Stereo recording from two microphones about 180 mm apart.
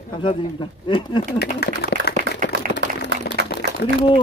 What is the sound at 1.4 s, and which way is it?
Speech, 65° left (ahead or behind).